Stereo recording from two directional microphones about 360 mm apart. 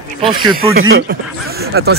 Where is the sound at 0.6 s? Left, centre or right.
Right.